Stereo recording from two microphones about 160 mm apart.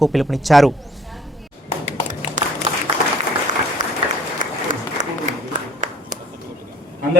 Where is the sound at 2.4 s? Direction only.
50° right (ahead or behind).